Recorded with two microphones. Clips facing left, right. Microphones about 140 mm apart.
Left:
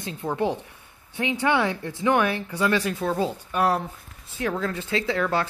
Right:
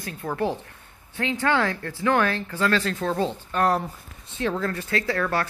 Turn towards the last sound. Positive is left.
turn(degrees=20)  # may be behind; listen again after turning